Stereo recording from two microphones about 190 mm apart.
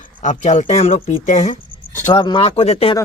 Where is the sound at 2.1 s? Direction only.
25° left (ahead or behind).